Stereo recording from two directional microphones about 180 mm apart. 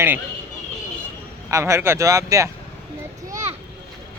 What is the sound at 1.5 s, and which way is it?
Speech, 15° right (ahead or behind).